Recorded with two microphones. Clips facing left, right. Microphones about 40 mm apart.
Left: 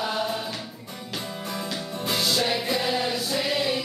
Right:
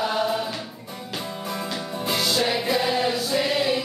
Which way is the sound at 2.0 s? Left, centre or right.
Centre.